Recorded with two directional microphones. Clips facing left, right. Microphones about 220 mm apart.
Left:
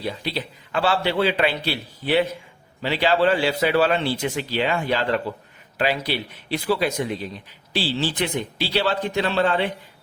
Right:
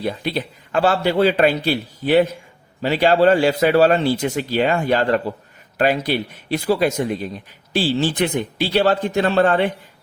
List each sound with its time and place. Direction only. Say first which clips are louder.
0.0 s speech: right 5 dB; 50° right (ahead or behind)